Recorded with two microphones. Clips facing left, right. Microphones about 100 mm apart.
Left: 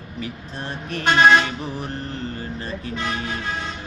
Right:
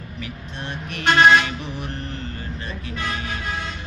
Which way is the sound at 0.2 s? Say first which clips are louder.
Left 3 dB; 35° left (ahead or behind).